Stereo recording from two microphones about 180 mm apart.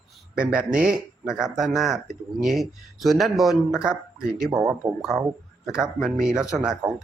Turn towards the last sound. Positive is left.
turn(degrees=-5)  # may be behind; listen again after turning